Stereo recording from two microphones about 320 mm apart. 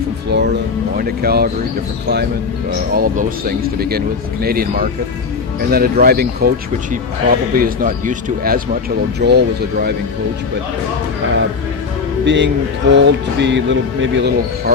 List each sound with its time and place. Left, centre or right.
0.3 s speech: right
2.6 s a man's voice: right
12.2 s a man's voice: right